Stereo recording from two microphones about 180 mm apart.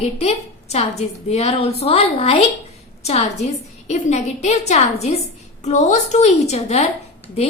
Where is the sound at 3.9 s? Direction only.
40° left (ahead or behind).